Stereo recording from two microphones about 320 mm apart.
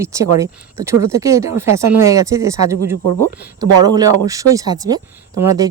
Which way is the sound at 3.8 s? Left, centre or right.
Centre.